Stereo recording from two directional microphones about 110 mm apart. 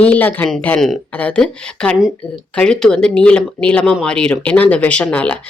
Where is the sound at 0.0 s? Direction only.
15° left (ahead or behind).